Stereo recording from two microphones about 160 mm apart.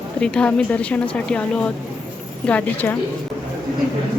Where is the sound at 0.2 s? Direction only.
5° left (ahead or behind).